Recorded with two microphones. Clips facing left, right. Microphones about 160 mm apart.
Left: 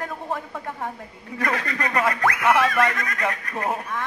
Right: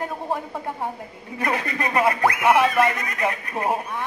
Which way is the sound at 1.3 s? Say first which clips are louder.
Right 1 dB; 15° right (ahead or behind).